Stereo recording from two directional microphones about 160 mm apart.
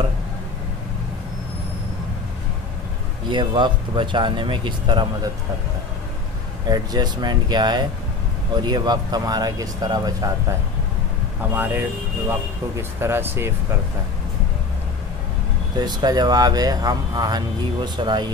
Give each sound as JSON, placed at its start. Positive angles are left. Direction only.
{"t": 3.3, "sound": "speech", "side_deg": -30}
{"t": 6.7, "sound": "speech", "side_deg": -25}
{"t": 11.5, "sound": "speech", "side_deg": -15}
{"t": 15.8, "sound": "speech", "side_deg": -25}